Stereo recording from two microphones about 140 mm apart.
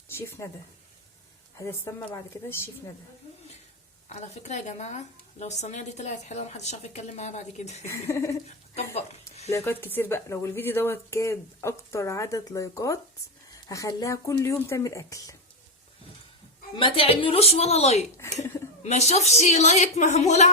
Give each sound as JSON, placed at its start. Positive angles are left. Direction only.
{"t": 0.1, "sound": "speech", "side_deg": 15}
{"t": 1.5, "sound": "speech", "side_deg": 20}
{"t": 4.1, "sound": "a woman's voice", "side_deg": 55}
{"t": 7.9, "sound": "speech", "side_deg": 20}
{"t": 9.0, "sound": "a sound", "side_deg": 50}
{"t": 9.5, "sound": "speech", "side_deg": 20}
{"t": 16.7, "sound": "a woman's voice", "side_deg": 40}